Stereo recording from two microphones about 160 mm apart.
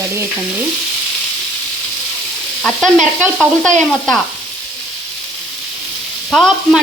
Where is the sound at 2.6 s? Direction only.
5° left (ahead or behind).